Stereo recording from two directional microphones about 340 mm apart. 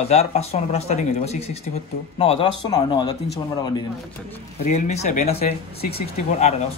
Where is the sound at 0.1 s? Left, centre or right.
Centre.